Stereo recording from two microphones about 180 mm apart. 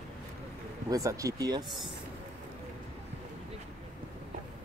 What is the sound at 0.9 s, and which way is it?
Speech, 20° right (ahead or behind).